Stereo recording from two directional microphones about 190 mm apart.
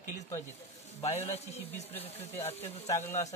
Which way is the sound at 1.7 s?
10° left (ahead or behind).